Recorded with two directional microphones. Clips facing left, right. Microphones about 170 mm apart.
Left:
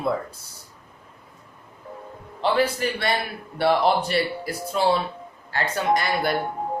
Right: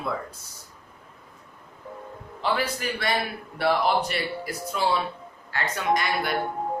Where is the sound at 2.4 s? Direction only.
30° left (ahead or behind).